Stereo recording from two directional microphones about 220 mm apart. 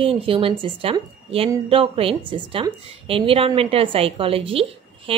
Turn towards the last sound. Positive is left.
turn(degrees=-25)  # may be behind; listen again after turning